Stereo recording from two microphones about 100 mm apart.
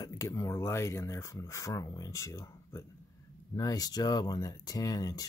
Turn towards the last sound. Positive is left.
turn(degrees=40)  # may be behind; listen again after turning